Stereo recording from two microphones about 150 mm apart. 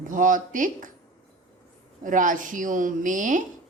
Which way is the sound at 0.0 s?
60° right (ahead or behind).